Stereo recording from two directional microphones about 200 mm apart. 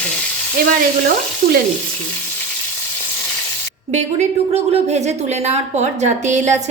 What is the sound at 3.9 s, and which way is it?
A woman's voice, 35° right (ahead or behind).